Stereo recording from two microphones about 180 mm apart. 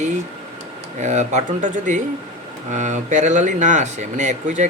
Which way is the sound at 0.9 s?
40° right (ahead or behind).